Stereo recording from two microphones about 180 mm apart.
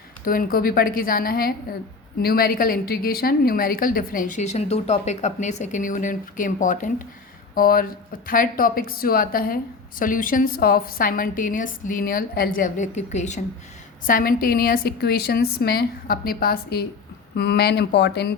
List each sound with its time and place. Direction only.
0.3 s a woman's voice: 55° left (ahead or behind)
14.1 s a woman's voice: 50° left (ahead or behind)